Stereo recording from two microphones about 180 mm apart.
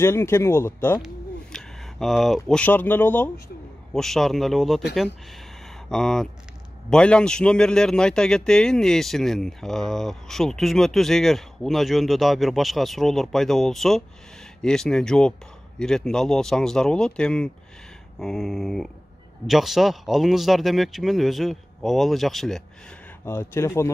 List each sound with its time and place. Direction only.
0.0 s a man's voice: 15° left (ahead or behind)
5.9 s a man's voice: 5° left (ahead or behind)
23.2 s speech: 15° left (ahead or behind)